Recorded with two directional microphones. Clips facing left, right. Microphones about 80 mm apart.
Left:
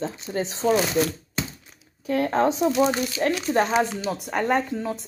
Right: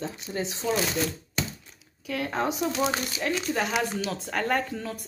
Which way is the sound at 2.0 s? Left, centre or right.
Left.